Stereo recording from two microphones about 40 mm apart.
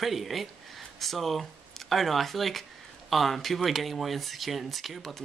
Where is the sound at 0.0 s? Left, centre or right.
Centre.